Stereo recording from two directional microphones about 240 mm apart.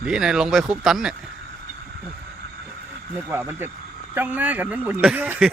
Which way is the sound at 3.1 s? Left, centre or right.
Centre.